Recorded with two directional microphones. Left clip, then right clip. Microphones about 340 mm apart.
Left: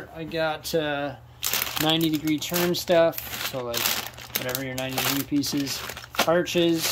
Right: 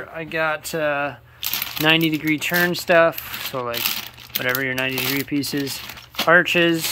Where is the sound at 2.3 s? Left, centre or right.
Centre.